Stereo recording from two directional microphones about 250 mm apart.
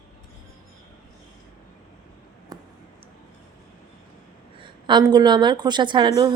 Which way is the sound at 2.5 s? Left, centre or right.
Centre.